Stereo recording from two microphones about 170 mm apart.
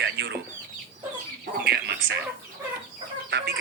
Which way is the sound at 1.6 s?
75° right (ahead or behind).